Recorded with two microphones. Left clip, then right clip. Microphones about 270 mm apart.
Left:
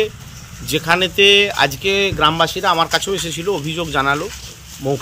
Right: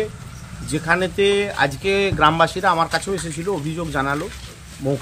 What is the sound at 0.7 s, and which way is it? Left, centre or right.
Speech, centre.